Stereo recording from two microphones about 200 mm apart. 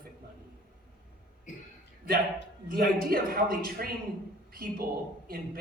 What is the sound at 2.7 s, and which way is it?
Speech, 50° right (ahead or behind).